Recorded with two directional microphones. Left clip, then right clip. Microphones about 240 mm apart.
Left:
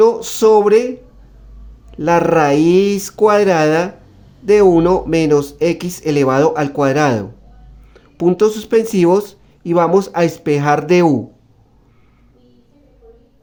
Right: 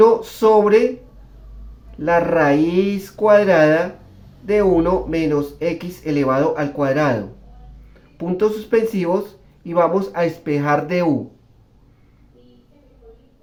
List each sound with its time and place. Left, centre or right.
0.0 s speech: left
2.0 s speech: left